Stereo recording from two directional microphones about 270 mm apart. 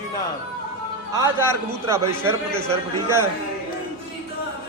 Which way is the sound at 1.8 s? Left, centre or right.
Centre.